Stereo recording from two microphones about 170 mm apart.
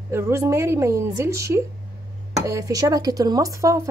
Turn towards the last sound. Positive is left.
turn(degrees=-20)  # may be behind; listen again after turning